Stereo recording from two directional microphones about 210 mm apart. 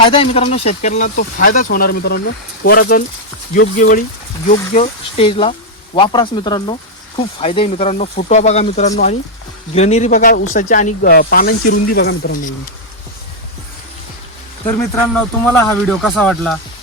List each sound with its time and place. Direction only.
0.0 s speech: 25° left (ahead or behind); by 12.5 s 40° left (ahead or behind)
14.7 s speech: 10° left (ahead or behind)